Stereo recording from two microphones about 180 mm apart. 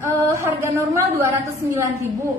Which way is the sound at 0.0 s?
15° right (ahead or behind).